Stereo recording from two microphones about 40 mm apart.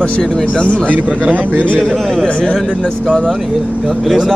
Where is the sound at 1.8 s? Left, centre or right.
Centre.